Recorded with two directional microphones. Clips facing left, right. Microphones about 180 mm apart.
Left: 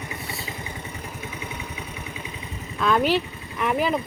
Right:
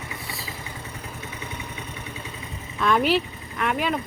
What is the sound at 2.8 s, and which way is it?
Vehicle, centre (ahead or behind).